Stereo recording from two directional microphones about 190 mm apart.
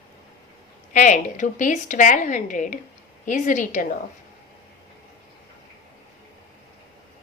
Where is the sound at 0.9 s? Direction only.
40° left (ahead or behind).